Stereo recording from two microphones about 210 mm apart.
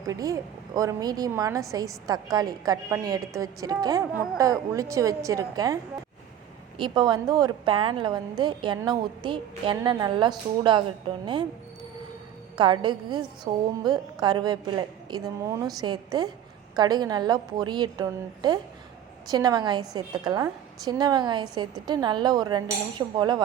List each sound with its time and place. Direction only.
0.1 s a woman's voice: 15° right (ahead or behind)
12.5 s a woman's voice: 20° right (ahead or behind)